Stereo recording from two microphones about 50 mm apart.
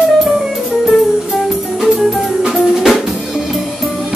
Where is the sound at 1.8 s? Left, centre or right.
Centre.